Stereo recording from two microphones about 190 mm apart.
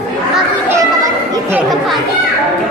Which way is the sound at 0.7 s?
15° right (ahead or behind).